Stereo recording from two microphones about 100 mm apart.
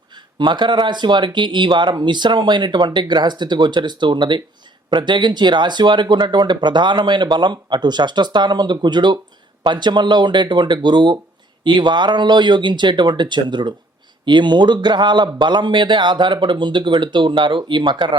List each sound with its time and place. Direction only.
0.1 s speech: 50° right (ahead or behind)